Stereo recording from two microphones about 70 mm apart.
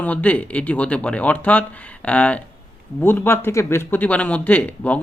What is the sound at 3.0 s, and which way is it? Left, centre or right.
Speech, left.